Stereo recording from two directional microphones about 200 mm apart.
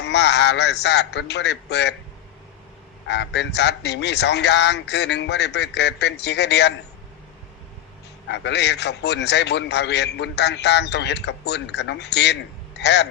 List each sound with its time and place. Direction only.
0.0 s a man's voice: 60° left (ahead or behind)
3.1 s a man's voice: 60° left (ahead or behind)
8.3 s a man's voice: 60° left (ahead or behind)